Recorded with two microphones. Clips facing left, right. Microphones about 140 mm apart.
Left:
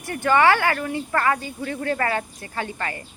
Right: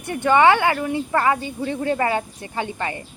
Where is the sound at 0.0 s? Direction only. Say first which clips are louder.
Right 3 dB; 20° right (ahead or behind).